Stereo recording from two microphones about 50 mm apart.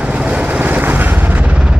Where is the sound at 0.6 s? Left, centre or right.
Right.